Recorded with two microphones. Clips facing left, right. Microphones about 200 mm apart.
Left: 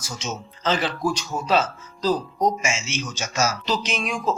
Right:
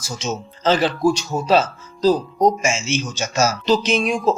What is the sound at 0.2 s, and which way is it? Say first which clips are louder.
Speech: right 6 dB; 30° right (ahead or behind).